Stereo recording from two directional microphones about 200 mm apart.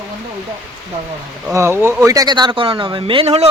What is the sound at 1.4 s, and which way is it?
Speech, 15° right (ahead or behind).